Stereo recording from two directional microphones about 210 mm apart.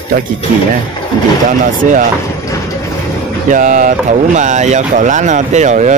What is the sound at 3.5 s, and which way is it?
Speech, 40° right (ahead or behind).